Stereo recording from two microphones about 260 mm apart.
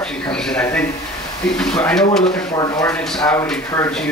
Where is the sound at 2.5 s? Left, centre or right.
Centre.